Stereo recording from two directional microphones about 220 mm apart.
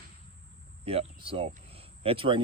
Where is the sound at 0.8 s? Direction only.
25° right (ahead or behind).